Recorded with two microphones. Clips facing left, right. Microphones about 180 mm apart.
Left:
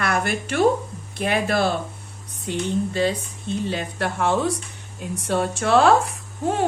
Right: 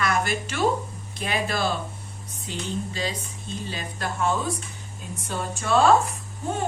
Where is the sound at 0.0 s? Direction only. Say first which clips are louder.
Left 2 dB; 60° left (ahead or behind).